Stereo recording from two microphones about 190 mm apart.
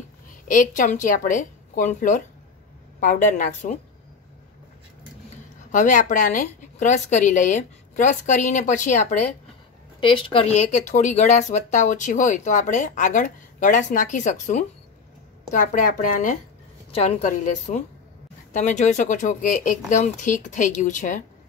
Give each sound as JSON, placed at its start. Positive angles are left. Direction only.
{"t": 0.5, "sound": "a woman's voice", "side_deg": 45}
{"t": 5.7, "sound": "speech", "side_deg": 40}
{"t": 9.9, "sound": "a woman's voice", "side_deg": 25}